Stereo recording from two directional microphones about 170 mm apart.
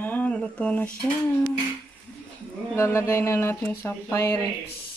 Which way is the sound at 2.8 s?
15° left (ahead or behind).